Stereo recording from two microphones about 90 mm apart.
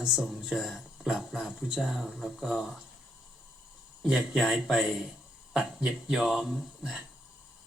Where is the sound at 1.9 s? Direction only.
5° right (ahead or behind).